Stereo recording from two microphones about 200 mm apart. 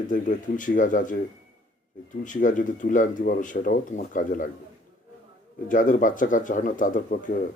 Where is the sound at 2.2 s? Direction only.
40° left (ahead or behind).